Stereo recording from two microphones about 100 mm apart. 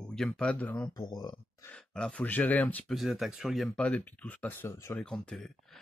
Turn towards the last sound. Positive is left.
turn(degrees=5)  # may be behind; listen again after turning